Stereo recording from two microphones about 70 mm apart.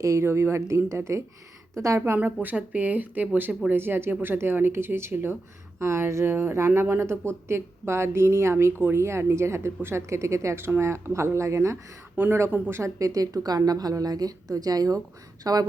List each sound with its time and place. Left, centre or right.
0.0 s a woman's voice: right
2.1 s speech: right
12.1 s speech: right
12.7 s a woman's voice: right